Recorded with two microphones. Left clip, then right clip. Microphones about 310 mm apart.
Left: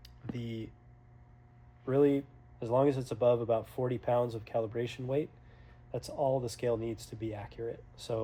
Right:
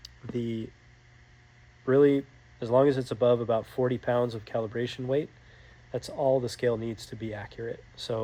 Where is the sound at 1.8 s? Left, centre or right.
Right.